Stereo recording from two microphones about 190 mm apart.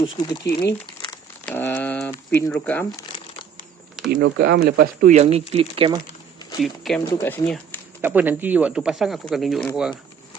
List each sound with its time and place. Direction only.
0.0 s speech: 20° left (ahead or behind)
1.5 s a sound: 10° left (ahead or behind)
2.3 s speech: 10° left (ahead or behind)
4.2 s speech: 60° right (ahead or behind); by 6.0 s 30° right (ahead or behind)
6.6 s speech: centre (ahead or behind)
7.1 s speech: 15° left (ahead or behind)
8.0 s speech: 10° right (ahead or behind)